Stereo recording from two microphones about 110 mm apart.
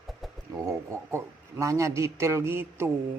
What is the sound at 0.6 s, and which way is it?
A woman's voice, 25° right (ahead or behind).